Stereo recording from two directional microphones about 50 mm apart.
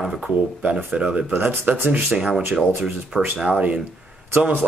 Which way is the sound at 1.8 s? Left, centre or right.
Right.